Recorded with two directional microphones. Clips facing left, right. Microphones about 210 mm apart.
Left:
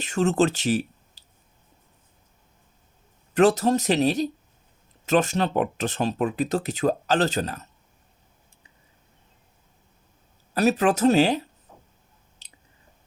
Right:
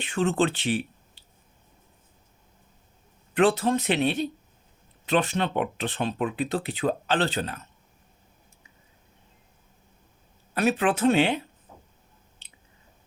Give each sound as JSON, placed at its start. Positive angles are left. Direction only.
{"t": 0.0, "sound": "speech", "side_deg": 45}
{"t": 1.2, "sound": "squish", "side_deg": 40}
{"t": 3.3, "sound": "speech", "side_deg": 45}
{"t": 10.5, "sound": "speech", "side_deg": 40}
{"t": 12.4, "sound": "a sound", "side_deg": 40}